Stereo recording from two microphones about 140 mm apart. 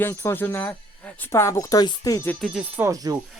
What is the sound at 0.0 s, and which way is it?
Speech, 15° left (ahead or behind).